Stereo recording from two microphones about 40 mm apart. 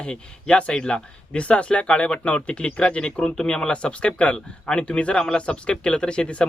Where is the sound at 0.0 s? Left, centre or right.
Left.